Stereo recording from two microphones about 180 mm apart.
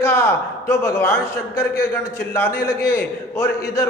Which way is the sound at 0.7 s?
15° left (ahead or behind).